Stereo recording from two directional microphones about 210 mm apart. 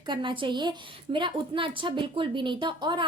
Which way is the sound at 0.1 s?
25° right (ahead or behind).